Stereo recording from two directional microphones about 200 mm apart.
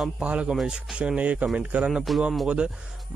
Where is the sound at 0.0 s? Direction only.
5° right (ahead or behind).